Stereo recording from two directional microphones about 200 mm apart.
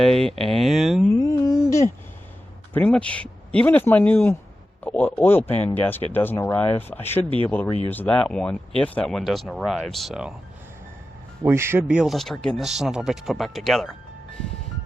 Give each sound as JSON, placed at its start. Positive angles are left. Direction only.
{"t": 0.0, "sound": "speech", "side_deg": 0}
{"t": 1.2, "sound": "a sound", "side_deg": 20}
{"t": 2.7, "sound": "speech", "side_deg": 5}
{"t": 11.4, "sound": "speech", "side_deg": -10}